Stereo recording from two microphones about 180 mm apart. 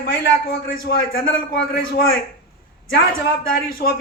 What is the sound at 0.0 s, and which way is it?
A man's voice, 55° left (ahead or behind).